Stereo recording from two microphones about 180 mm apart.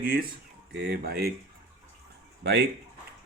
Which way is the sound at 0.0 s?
55° right (ahead or behind).